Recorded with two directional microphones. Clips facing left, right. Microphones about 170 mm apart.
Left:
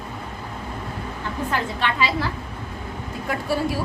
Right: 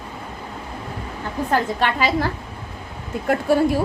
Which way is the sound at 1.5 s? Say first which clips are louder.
Right 6 dB; 45° right (ahead or behind).